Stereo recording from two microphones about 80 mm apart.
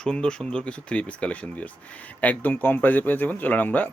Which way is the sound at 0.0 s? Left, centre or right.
Centre.